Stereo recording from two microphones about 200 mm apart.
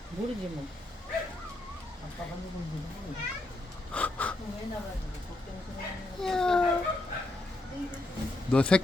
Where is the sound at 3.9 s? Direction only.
5° left (ahead or behind).